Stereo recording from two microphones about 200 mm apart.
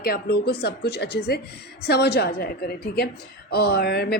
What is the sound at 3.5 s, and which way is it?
Speech, 50° left (ahead or behind).